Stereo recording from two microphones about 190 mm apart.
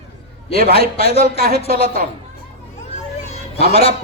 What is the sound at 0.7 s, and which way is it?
Speech, 30° left (ahead or behind).